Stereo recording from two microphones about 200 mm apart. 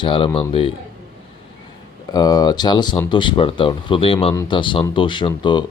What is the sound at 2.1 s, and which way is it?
Speech, 20° left (ahead or behind).